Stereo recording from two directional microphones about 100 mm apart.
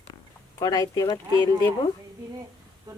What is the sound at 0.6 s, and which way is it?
Speech, 40° left (ahead or behind).